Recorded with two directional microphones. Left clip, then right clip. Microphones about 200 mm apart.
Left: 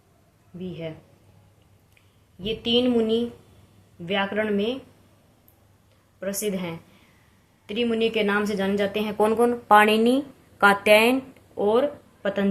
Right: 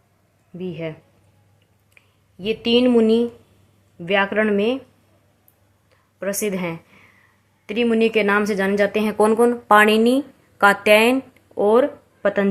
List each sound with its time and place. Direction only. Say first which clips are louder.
0.6 s speech: right 6 dB; 30° right (ahead or behind)
2.0 s speech: right 5 dB; 30° right (ahead or behind)
6.1 s speech: right 5 dB; 30° right (ahead or behind)
11.5 s speech: right 5 dB; 30° right (ahead or behind)